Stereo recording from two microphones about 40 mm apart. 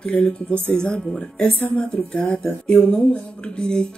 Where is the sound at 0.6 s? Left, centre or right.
Left.